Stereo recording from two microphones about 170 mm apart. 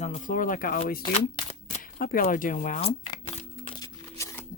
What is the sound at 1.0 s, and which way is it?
Shuffling cards, 35° left (ahead or behind).